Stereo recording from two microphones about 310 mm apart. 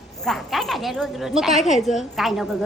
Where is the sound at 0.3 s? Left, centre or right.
Centre.